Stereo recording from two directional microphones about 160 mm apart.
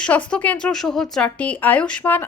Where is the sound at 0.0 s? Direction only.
10° left (ahead or behind).